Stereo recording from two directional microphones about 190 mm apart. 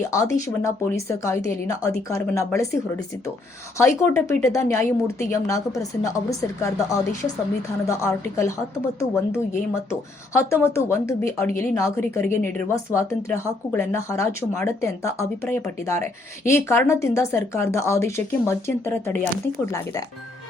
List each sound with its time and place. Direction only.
0.0 s speech: 15° left (ahead or behind)
9.9 s speech: 15° left (ahead or behind)